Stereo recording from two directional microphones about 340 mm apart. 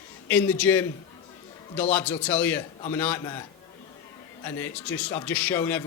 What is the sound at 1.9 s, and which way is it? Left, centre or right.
A man's voice, centre.